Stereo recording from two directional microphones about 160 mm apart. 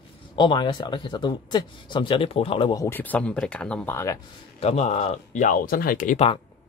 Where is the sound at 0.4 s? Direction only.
30° left (ahead or behind).